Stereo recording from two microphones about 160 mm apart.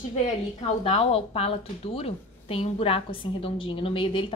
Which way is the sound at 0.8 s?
35° left (ahead or behind).